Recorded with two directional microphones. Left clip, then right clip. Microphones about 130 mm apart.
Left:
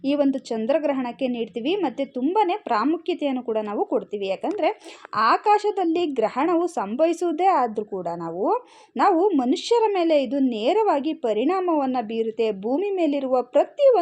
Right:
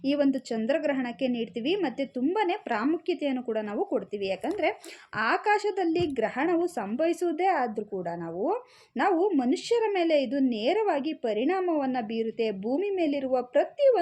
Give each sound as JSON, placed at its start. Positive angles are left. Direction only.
{"t": 0.0, "sound": "a woman's voice", "side_deg": 30}